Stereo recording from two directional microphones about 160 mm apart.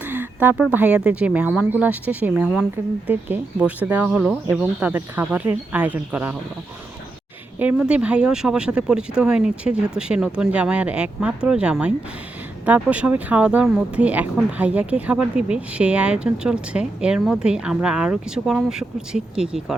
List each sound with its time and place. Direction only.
0.0 s speech: 10° right (ahead or behind)
7.6 s speech: 10° right (ahead or behind)